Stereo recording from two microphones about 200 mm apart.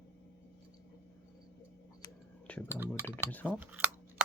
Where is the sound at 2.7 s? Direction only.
10° right (ahead or behind).